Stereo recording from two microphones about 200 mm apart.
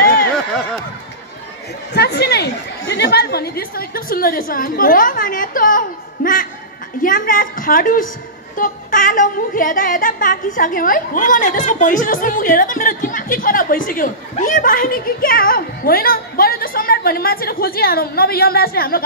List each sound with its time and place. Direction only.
2.0 s a woman's voice: 55° left (ahead or behind)